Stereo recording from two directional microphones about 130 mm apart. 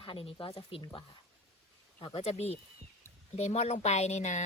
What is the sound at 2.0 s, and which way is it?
Speech, 50° left (ahead or behind).